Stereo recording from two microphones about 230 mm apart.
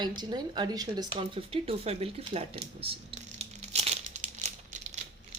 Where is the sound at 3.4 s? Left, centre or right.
Right.